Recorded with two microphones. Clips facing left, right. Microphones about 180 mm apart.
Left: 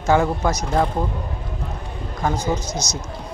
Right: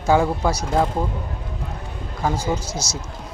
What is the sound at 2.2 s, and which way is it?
Speech, 5° right (ahead or behind).